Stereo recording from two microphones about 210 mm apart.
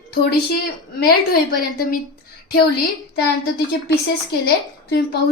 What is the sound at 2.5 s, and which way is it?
Speech, 45° left (ahead or behind).